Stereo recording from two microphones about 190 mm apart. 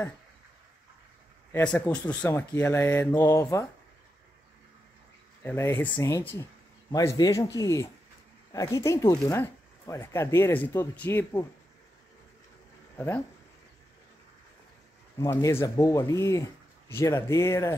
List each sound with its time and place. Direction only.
1.5 s speech: 5° left (ahead or behind)
5.4 s speech: 10° left (ahead or behind)
12.9 s speech: 10° left (ahead or behind)
15.1 s speech: 15° left (ahead or behind)